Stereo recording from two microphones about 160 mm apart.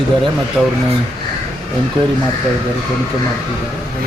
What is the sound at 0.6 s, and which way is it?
Speech, 5° right (ahead or behind).